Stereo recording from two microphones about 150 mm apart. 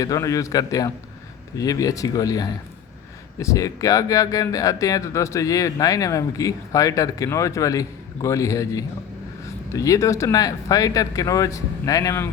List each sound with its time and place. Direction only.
0.0 s speech: 25° left (ahead or behind)